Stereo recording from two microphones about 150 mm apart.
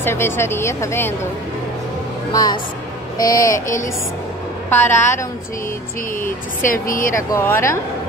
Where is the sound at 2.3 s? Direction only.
25° left (ahead or behind).